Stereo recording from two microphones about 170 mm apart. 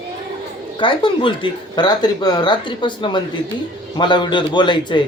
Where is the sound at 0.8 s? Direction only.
30° left (ahead or behind).